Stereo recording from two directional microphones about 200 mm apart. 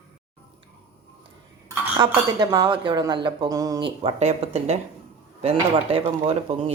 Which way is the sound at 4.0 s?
30° right (ahead or behind).